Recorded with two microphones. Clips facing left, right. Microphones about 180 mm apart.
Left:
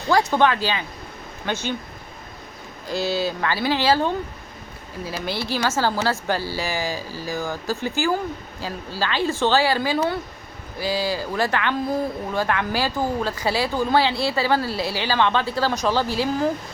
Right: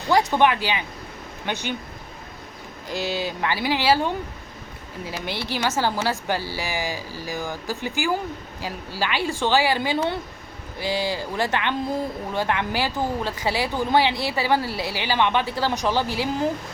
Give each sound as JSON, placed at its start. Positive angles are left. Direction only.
{"t": 0.1, "sound": "a woman's voice", "side_deg": -20}
{"t": 2.9, "sound": "a woman's voice", "side_deg": -15}